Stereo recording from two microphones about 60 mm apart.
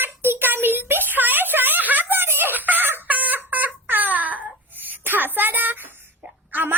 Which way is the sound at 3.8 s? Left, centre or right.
Right.